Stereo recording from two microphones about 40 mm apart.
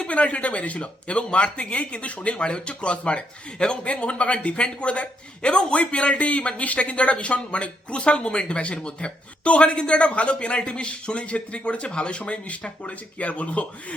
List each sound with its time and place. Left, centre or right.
0.1 s speech: left